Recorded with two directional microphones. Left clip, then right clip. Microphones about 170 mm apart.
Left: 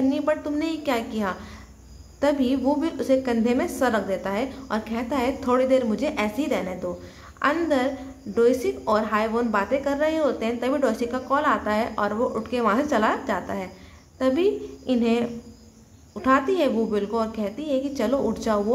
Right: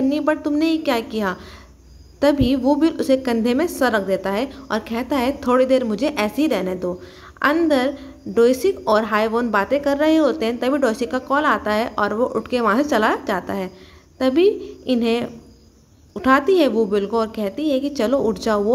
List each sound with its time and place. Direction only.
0.1 s a woman's voice: 35° right (ahead or behind)